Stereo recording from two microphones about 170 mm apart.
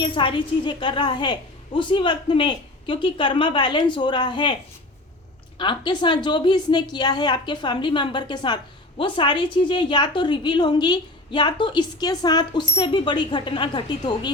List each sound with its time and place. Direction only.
0.0 s a woman's voice: 30° left (ahead or behind)
5.5 s a woman's voice: 30° left (ahead or behind)